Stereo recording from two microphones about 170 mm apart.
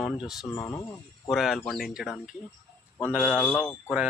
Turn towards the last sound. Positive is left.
turn(degrees=5)  # may be behind; listen again after turning